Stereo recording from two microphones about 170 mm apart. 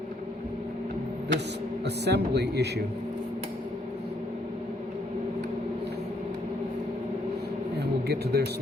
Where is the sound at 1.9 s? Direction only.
75° right (ahead or behind).